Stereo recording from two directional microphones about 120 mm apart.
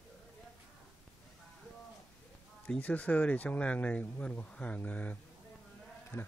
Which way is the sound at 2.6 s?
10° left (ahead or behind).